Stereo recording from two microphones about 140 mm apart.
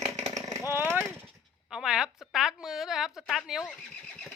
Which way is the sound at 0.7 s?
15° right (ahead or behind).